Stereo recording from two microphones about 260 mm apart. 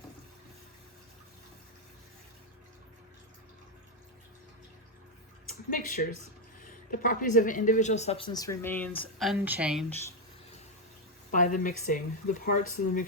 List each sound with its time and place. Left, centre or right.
5.7 s speech: left; by 9.8 s centre
11.3 s speech: left